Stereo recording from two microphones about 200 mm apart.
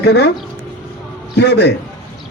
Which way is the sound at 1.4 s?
60° left (ahead or behind).